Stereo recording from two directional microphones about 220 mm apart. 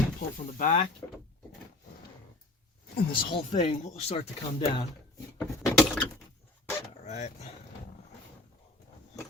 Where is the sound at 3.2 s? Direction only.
30° left (ahead or behind).